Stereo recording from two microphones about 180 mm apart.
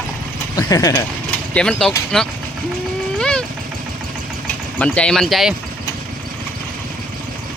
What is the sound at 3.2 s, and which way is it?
Vehicle, 5° left (ahead or behind).